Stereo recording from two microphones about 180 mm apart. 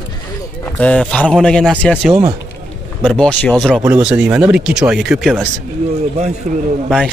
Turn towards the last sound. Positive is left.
turn(degrees=0)  # may be behind; listen again after turning